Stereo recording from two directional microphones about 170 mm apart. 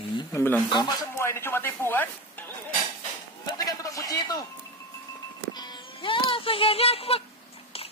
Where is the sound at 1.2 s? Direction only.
15° left (ahead or behind).